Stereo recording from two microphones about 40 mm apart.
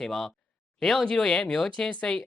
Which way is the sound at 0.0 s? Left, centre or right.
Centre.